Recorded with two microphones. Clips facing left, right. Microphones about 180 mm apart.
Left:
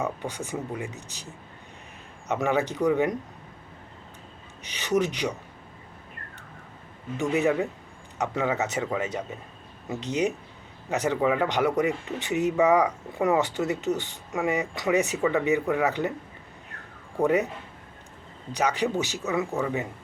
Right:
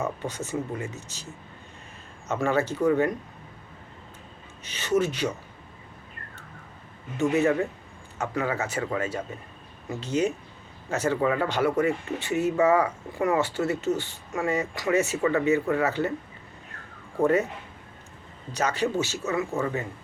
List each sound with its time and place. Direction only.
0.0 s speech: 15° left (ahead or behind)
4.6 s speech: 15° left (ahead or behind)
7.2 s speech: 15° left (ahead or behind)
17.2 s speech: 15° left (ahead or behind)
18.5 s speech: 15° left (ahead or behind)